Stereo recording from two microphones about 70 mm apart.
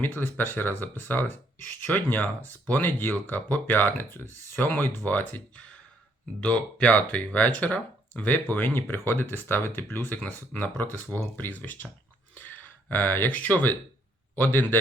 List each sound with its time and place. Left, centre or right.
0.0 s speech: left
12.3 s a sound: left
14.3 s speech: left